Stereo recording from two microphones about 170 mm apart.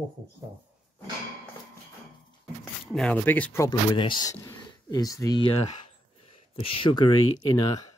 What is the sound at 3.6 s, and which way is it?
Speech, 30° left (ahead or behind).